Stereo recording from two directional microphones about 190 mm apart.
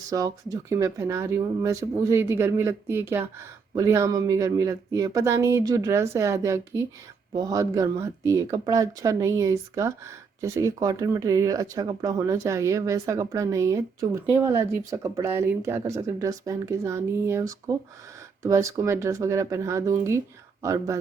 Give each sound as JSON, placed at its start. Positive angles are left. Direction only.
{"t": 0.1, "sound": "speech", "side_deg": -20}